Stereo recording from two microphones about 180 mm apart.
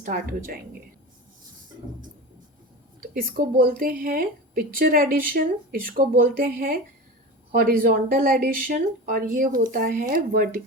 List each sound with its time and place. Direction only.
0.0 s a woman's voice: 50° right (ahead or behind)
3.0 s a woman's voice: 55° right (ahead or behind)